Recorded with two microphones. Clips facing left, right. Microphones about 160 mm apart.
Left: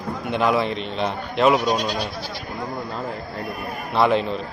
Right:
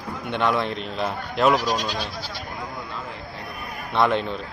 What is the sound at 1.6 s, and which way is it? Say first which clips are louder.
Speech: left 3 dB; 25° left (ahead or behind).